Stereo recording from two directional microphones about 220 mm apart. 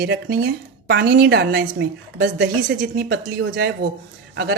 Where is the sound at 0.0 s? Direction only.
45° right (ahead or behind).